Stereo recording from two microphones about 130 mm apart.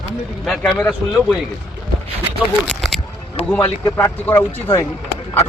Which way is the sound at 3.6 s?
20° left (ahead or behind).